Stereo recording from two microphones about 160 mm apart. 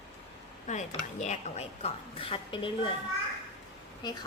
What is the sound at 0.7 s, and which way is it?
A woman's voice, 45° left (ahead or behind).